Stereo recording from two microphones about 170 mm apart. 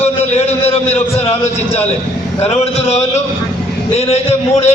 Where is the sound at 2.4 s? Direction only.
40° left (ahead or behind).